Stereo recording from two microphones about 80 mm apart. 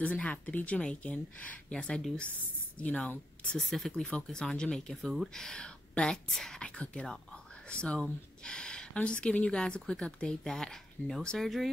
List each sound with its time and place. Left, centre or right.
0.0 s speech: centre